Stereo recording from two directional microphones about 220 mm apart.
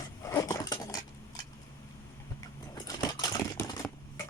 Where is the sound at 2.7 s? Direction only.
15° left (ahead or behind).